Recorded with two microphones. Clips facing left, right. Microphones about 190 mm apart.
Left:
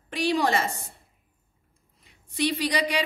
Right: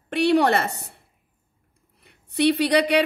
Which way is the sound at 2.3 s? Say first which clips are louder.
Right 7 dB; 65° right (ahead or behind).